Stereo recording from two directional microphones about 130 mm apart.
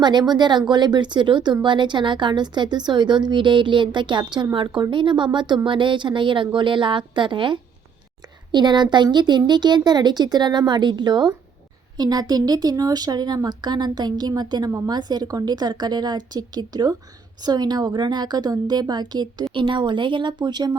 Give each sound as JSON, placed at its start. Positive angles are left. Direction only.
{"t": 0.0, "sound": "a woman's voice", "side_deg": -35}